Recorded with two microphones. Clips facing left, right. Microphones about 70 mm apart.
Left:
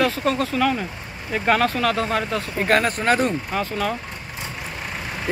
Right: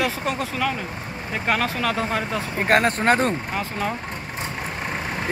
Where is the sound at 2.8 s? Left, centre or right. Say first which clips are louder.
Right 1 dB; right.